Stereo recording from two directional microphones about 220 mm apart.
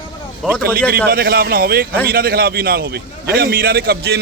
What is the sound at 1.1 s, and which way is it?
A man's voice, 40° right (ahead or behind).